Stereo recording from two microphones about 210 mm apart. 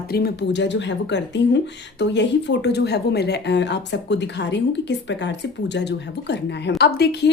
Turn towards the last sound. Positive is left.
turn(degrees=50)  # may be behind; listen again after turning